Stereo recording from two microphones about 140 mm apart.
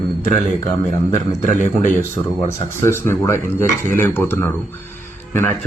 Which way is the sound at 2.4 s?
20° left (ahead or behind).